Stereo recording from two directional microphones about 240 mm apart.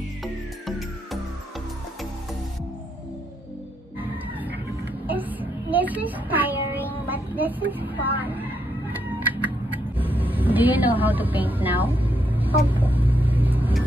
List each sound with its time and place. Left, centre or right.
0.2 s music: centre
5.0 s child singing: centre
9.7 s vehicle: centre